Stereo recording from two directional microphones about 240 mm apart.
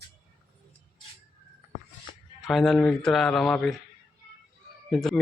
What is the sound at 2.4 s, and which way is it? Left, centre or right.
Speech, centre.